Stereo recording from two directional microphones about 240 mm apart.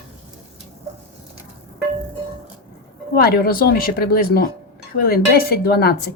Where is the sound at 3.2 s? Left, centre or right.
Left.